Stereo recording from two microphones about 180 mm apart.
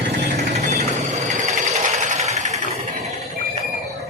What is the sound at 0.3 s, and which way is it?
Sewing machine, 35° right (ahead or behind).